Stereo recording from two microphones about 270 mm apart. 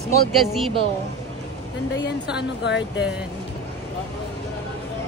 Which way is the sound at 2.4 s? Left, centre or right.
Left.